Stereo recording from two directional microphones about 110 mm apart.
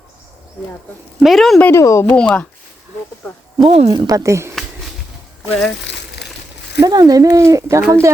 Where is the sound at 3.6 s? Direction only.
70° right (ahead or behind).